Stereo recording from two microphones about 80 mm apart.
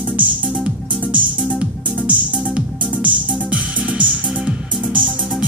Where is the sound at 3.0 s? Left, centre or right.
Centre.